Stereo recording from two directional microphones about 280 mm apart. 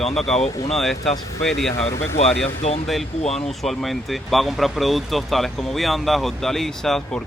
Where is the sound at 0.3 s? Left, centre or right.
Left.